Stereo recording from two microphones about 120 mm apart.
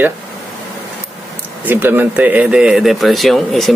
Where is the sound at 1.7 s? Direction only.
15° right (ahead or behind); by 3.7 s centre (ahead or behind).